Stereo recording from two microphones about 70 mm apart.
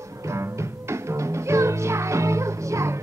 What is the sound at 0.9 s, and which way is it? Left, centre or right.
Music, right.